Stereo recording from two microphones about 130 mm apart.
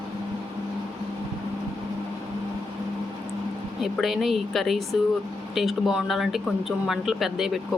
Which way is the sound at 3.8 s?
Centre (ahead or behind).